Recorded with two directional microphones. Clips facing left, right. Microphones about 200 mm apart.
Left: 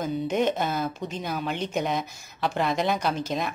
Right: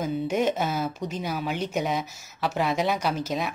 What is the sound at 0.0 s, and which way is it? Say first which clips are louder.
Speech: even; 5° right (ahead or behind).